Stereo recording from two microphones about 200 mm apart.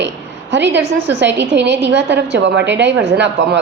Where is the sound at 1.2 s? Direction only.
60° right (ahead or behind).